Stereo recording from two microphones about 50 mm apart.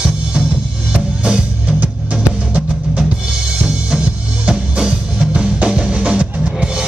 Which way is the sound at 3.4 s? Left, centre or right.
Centre.